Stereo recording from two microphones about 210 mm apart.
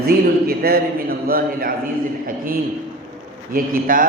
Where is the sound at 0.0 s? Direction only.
45° right (ahead or behind).